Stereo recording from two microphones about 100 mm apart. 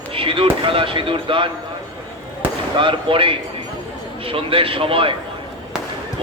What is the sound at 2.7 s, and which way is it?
Speech, 55° right (ahead or behind).